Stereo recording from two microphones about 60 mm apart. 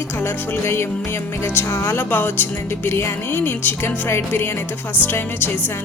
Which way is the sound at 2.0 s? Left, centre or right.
Left.